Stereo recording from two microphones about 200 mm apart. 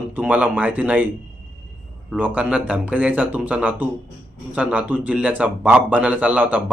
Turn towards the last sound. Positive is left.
turn(degrees=-10)  # may be behind; listen again after turning